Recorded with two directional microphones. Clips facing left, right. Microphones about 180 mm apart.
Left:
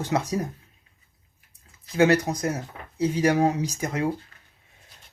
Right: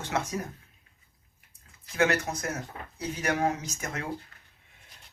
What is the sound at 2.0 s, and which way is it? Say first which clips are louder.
Speech: left 7 dB; 35° left (ahead or behind).